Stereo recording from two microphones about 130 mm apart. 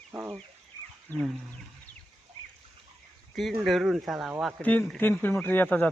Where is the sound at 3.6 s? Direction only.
Centre (ahead or behind).